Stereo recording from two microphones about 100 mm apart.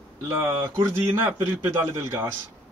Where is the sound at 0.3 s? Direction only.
30° right (ahead or behind).